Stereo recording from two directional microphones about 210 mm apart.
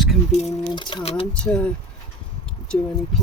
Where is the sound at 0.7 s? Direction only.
25° left (ahead or behind).